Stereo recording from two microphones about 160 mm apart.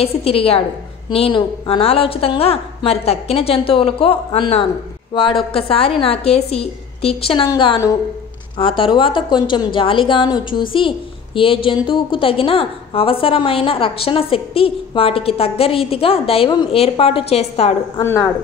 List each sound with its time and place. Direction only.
0.0 s a woman's voice: 40° left (ahead or behind)
18.0 s speech: 15° left (ahead or behind)